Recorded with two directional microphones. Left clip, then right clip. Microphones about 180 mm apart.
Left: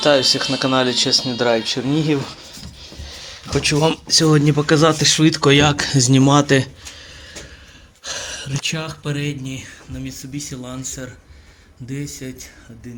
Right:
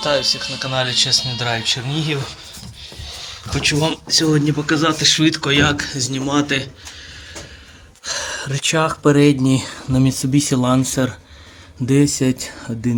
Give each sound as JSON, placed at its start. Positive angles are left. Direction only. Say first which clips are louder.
{"t": 0.0, "sound": "speech", "louder": "left 3 dB", "side_deg": -5}
{"t": 3.5, "sound": "speech", "louder": "left 1 dB", "side_deg": 0}
{"t": 8.0, "sound": "a sound", "louder": "right 4 dB", "side_deg": -20}
{"t": 9.0, "sound": "speech", "louder": "right 13 dB", "side_deg": -40}
{"t": 10.6, "sound": "speech", "louder": "right 13 dB", "side_deg": -30}
{"t": 11.9, "sound": "speech", "louder": "right 14 dB", "side_deg": -45}